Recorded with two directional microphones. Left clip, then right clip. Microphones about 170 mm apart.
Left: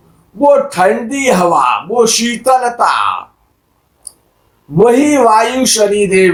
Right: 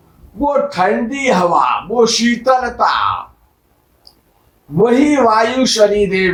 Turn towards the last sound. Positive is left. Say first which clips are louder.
# left 2 dB
turn(degrees=45)  # may be behind; listen again after turning